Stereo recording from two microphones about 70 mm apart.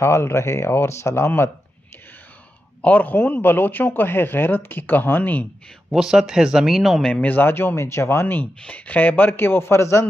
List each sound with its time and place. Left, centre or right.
0.0 s speech: left
2.8 s speech: left
5.9 s speech: centre
7.0 s speech: centre
7.3 s speech: left
8.6 s speech: left